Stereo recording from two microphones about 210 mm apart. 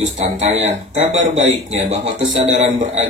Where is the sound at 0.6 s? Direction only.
30° right (ahead or behind).